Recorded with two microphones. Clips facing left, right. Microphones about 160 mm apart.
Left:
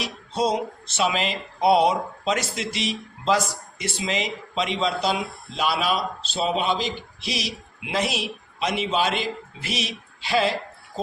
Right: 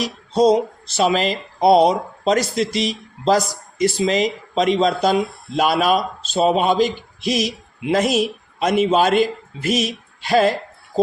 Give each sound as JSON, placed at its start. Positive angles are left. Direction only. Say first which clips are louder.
{"t": 0.0, "sound": "speech", "louder": "right 9 dB", "side_deg": -35}